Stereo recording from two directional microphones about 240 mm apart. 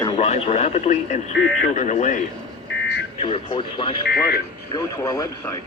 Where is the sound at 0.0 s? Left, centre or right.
Left.